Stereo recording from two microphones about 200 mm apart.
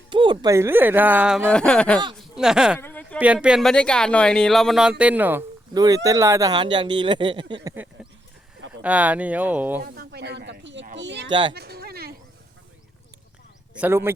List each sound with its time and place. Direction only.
0.1 s speech: 25° right (ahead or behind); by 1.5 s 5° right (ahead or behind)
1.5 s speech: 5° left (ahead or behind)
2.8 s a sound: 10° left (ahead or behind)
3.2 s speech: 5° right (ahead or behind); by 7.7 s 25° right (ahead or behind)
8.8 s speech: 5° right (ahead or behind)
9.8 s speech: 50° right (ahead or behind)
11.3 s speech: 25° right (ahead or behind)
11.5 s a sound: 55° right (ahead or behind)
13.7 s speech: 10° right (ahead or behind)